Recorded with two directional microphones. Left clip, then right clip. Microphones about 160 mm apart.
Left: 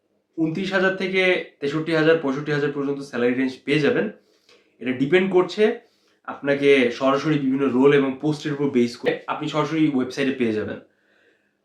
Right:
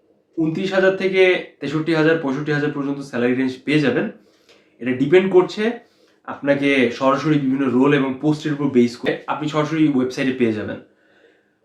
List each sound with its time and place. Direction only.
0.3 s speech: 10° left (ahead or behind)